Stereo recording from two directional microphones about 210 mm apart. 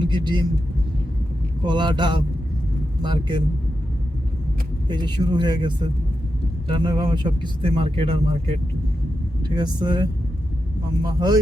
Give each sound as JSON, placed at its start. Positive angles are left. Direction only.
{"t": 0.0, "sound": "speech", "side_deg": -20}
{"t": 1.6, "sound": "speech", "side_deg": -20}
{"t": 4.9, "sound": "speech", "side_deg": -20}